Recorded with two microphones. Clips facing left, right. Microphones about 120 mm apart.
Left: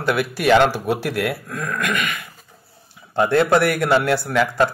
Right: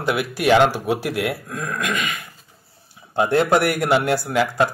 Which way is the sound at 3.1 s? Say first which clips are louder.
Left 1 dB; 15° right (ahead or behind).